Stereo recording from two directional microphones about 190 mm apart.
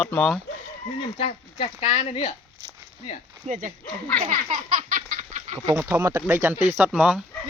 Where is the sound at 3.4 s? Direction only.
40° right (ahead or behind).